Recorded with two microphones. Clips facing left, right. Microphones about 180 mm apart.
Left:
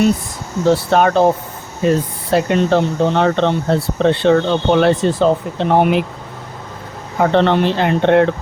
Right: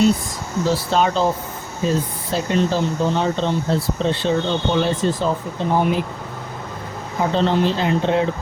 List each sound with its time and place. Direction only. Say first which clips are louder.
0.7 s speech: left 6 dB; 60° left (ahead or behind)
7.2 s speech: left 5 dB; 65° left (ahead or behind)